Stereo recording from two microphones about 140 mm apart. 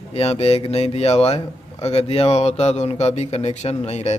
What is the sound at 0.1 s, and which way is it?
Speech, 45° left (ahead or behind).